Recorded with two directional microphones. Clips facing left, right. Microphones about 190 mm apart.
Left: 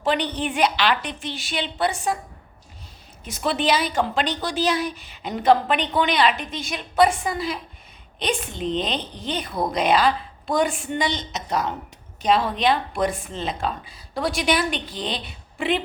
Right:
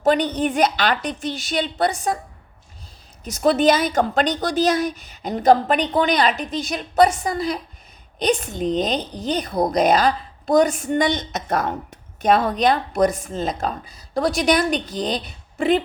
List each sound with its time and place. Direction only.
0.0 s speech: 45° right (ahead or behind)
3.2 s a woman's voice: 40° right (ahead or behind)